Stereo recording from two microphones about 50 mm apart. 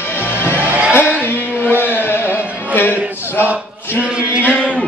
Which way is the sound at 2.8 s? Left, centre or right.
Left.